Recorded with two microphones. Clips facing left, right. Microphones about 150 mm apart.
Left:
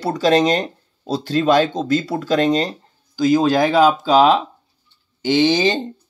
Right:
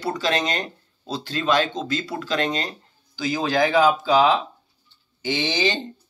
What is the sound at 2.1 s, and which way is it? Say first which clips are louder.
Speech: left 8 dB; 35° left (ahead or behind).